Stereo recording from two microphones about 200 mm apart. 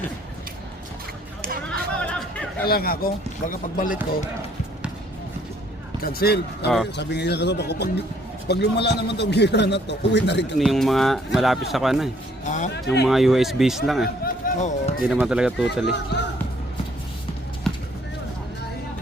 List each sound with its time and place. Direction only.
1.6 s chatter: 5° left (ahead or behind)
2.6 s speech: 50° left (ahead or behind)
6.0 s speech: 50° left (ahead or behind)
10.6 s speech: centre (ahead or behind)
12.5 s speech: 40° left (ahead or behind)
13.1 s speech: centre (ahead or behind)
14.4 s speech: 40° left (ahead or behind)
15.0 s speech: centre (ahead or behind)
15.8 s speech: 60° left (ahead or behind)
17.7 s a sound: centre (ahead or behind)